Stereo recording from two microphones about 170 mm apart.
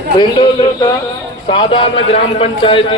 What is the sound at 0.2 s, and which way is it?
A man's voice, 25° left (ahead or behind).